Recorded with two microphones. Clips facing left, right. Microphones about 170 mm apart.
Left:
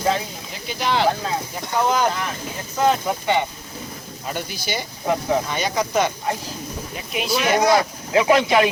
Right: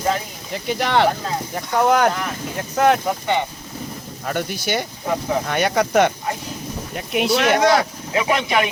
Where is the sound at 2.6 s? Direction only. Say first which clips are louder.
Right 3 dB; 65° right (ahead or behind).